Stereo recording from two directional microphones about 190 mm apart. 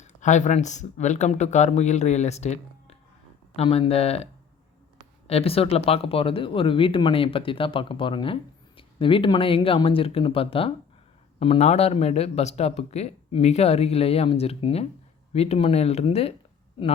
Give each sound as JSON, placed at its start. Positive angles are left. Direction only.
{"t": 0.0, "sound": "speech", "side_deg": 40}
{"t": 5.3, "sound": "speech", "side_deg": 30}